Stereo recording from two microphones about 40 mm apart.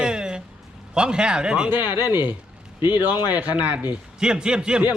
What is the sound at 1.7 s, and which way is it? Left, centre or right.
Speech, right.